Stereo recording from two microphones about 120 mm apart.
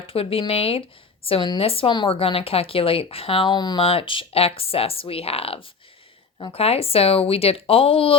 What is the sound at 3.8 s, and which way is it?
Speech, 50° left (ahead or behind).